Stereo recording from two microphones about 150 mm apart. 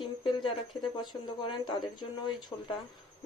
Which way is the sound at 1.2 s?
35° left (ahead or behind).